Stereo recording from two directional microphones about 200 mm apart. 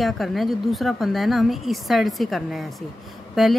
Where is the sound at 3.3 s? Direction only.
Centre (ahead or behind).